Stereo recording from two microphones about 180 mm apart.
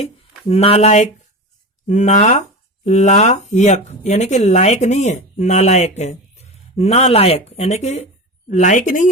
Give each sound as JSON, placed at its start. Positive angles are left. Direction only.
{"t": 0.0, "sound": "speech", "side_deg": 35}